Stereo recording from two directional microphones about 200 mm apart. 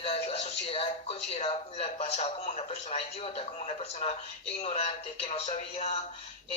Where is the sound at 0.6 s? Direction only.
30° left (ahead or behind).